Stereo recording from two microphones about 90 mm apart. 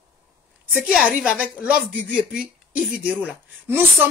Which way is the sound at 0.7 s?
10° right (ahead or behind).